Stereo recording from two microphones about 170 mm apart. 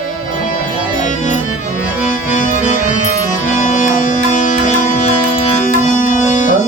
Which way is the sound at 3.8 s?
45° left (ahead or behind).